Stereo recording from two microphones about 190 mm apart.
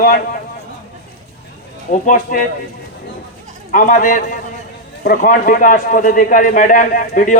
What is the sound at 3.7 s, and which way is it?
A man's voice, 45° left (ahead or behind).